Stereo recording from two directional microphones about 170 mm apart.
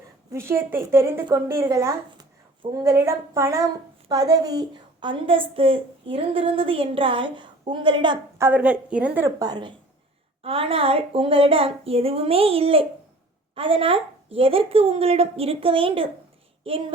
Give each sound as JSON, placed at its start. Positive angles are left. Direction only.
{"t": 0.3, "sound": "a woman's voice", "side_deg": -15}
{"t": 8.4, "sound": "a woman's voice", "side_deg": -10}